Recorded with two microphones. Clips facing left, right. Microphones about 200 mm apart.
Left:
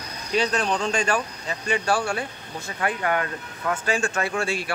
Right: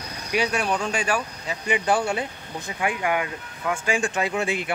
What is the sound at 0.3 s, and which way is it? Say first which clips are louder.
Speech: left 1 dB; 10° right (ahead or behind).